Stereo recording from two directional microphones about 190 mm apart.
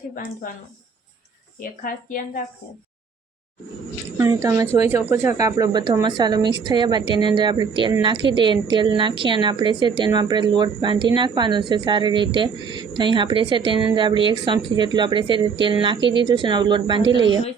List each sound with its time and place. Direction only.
1.8 s speech: 45° left (ahead or behind)
4.2 s a woman's voice: 15° right (ahead or behind)